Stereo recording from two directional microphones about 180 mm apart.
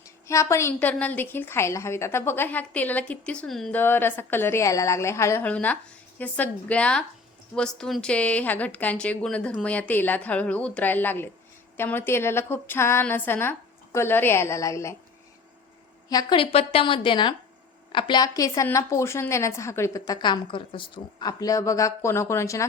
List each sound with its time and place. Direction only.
0.3 s a woman's voice: 15° left (ahead or behind)
16.0 s a woman's voice: 25° left (ahead or behind)